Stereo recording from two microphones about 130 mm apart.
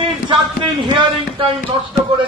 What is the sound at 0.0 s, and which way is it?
Speech, 40° right (ahead or behind).